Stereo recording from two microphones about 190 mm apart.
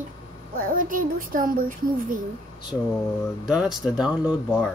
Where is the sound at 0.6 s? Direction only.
45° right (ahead or behind).